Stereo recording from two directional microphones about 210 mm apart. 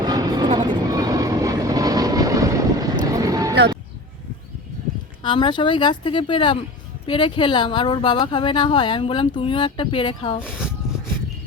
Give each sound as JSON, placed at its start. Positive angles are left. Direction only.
{"t": 0.0, "sound": "vehicle", "side_deg": -20}
{"t": 5.2, "sound": "speech", "side_deg": 20}
{"t": 10.4, "sound": "speech", "side_deg": -5}